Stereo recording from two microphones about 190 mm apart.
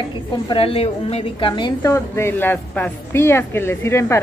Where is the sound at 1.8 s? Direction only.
15° left (ahead or behind).